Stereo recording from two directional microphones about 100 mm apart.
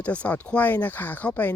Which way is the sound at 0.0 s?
15° left (ahead or behind).